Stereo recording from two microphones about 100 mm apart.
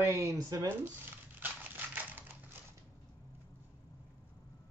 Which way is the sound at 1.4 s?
20° right (ahead or behind).